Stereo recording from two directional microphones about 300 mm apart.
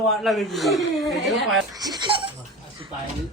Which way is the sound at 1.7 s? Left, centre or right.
Centre.